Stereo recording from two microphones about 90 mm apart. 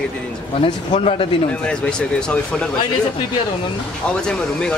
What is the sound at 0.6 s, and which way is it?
Speech, 85° left.